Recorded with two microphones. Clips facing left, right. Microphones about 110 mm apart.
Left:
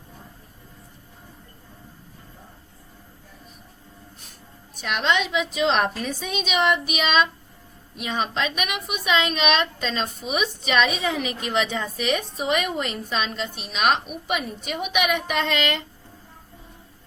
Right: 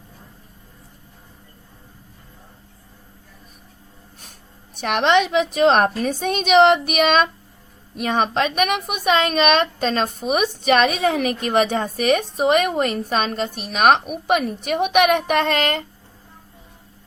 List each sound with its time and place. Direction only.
4.2 s a woman's voice: 65° right (ahead or behind); by 15.8 s 45° right (ahead or behind)